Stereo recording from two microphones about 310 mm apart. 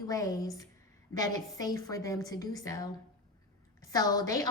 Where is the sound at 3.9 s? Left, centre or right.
Centre.